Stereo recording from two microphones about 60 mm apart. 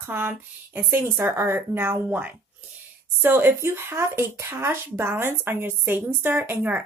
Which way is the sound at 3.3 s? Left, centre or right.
Right.